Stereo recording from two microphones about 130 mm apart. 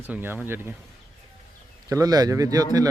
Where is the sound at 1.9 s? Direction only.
30° right (ahead or behind).